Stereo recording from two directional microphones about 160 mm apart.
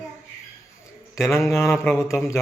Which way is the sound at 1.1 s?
20° left (ahead or behind).